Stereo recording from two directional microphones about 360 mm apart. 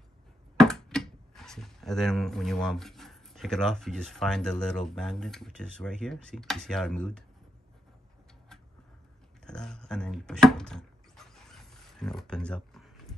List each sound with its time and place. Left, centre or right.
0.6 s speech: centre
9.5 s speech: centre
11.5 s a sound: centre